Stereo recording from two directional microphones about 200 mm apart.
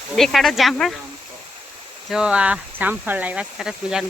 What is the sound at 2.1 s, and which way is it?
Speech, 5° right (ahead or behind).